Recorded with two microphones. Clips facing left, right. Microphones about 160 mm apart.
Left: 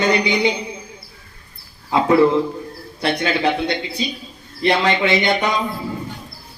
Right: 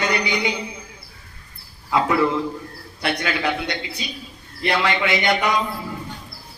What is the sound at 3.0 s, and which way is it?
A man's voice, 30° left (ahead or behind).